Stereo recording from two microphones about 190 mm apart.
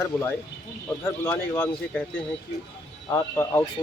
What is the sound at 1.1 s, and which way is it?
Speech, 15° left (ahead or behind).